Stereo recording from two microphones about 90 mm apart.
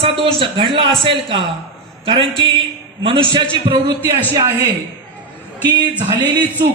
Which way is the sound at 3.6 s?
50° right (ahead or behind).